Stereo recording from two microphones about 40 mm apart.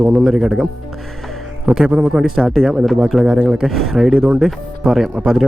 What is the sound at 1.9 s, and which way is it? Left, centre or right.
Speech, right.